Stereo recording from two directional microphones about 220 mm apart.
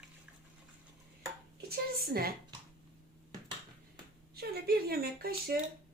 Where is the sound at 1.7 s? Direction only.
45° right (ahead or behind).